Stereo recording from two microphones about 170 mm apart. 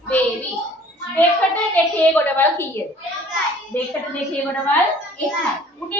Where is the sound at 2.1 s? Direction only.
10° left (ahead or behind).